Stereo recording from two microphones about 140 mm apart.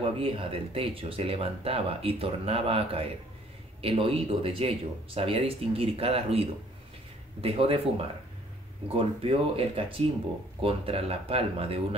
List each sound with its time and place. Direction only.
0.2 s speech: 40° right (ahead or behind)